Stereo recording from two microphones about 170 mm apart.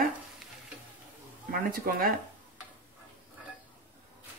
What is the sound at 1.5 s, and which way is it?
Speech, 55° right (ahead or behind).